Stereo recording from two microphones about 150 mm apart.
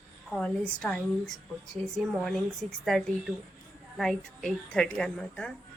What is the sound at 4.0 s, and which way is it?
A woman's voice, 5° left (ahead or behind).